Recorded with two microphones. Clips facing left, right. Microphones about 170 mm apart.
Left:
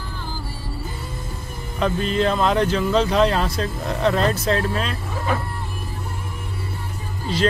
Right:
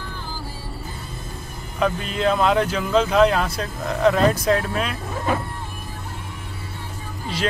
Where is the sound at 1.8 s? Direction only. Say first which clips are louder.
Left 2 dB; 5° right (ahead or behind).